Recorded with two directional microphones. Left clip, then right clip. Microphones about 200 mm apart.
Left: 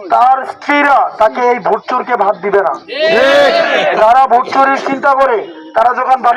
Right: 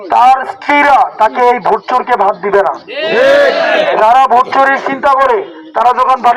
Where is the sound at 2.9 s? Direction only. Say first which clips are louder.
Left 4 dB; 35° left (ahead or behind).